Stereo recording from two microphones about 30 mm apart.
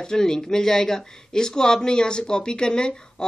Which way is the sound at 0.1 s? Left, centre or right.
Left.